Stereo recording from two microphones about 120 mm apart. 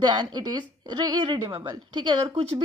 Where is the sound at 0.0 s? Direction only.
35° right (ahead or behind).